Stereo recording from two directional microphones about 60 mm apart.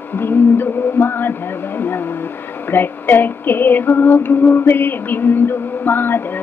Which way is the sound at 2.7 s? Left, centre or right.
Left.